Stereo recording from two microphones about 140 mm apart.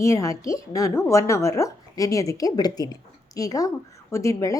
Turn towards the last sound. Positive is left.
turn(degrees=20)  # may be behind; listen again after turning